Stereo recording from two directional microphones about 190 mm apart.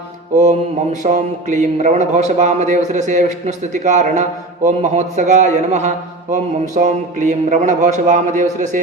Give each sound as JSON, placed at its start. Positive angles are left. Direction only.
{"t": 1.0, "sound": "a man's voice", "side_deg": -40}